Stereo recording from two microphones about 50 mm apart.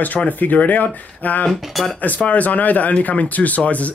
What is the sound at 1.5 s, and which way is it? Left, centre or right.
Speech, centre.